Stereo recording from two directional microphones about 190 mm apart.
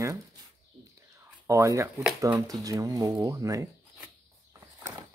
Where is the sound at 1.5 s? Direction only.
15° right (ahead or behind).